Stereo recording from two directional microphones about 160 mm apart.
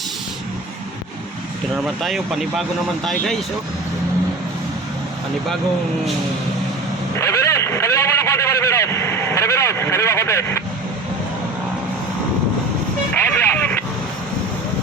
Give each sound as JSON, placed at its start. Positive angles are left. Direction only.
{"t": 1.7, "sound": "speech", "side_deg": 0}
{"t": 7.2, "sound": "vehicle", "side_deg": 20}
{"t": 13.3, "sound": "vehicle", "side_deg": 10}